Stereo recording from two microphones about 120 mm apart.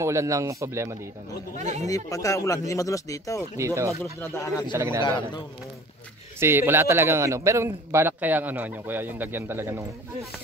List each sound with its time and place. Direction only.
0.0 s a man's voice: 25° right (ahead or behind)
1.6 s speech: 70° right (ahead or behind)
1.9 s speech: 30° left (ahead or behind)
3.5 s a man's voice: 25° right (ahead or behind)
4.2 s speech: 25° left (ahead or behind)
4.7 s a man's voice: 20° right (ahead or behind)
6.4 s a man's voice: 20° right (ahead or behind)